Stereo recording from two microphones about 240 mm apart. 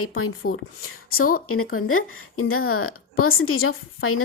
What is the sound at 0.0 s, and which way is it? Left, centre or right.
Speech, left.